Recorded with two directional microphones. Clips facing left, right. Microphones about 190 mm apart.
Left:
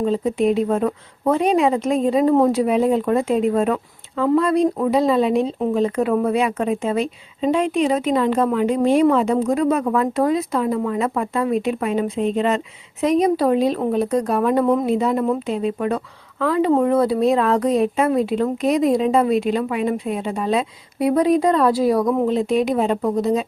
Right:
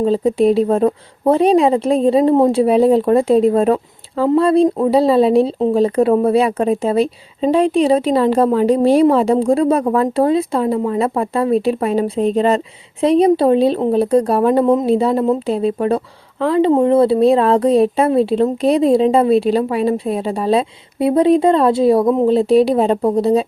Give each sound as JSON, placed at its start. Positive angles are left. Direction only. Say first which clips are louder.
{"t": 0.0, "sound": "a woman's voice", "louder": "right 5 dB", "side_deg": -35}